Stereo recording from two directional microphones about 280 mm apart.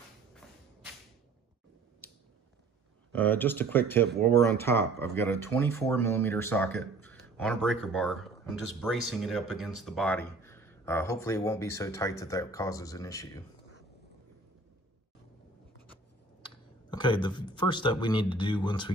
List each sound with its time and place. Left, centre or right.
3.1 s speech: centre
16.4 s speech: centre